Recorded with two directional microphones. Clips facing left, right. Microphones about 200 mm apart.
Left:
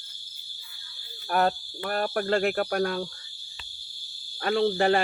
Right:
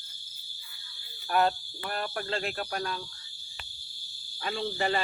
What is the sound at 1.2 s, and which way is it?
Speech, 45° left (ahead or behind).